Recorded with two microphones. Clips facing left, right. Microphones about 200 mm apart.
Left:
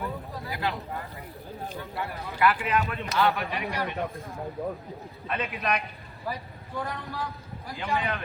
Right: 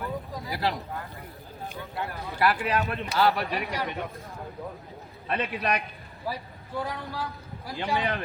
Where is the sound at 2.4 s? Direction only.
40° right (ahead or behind).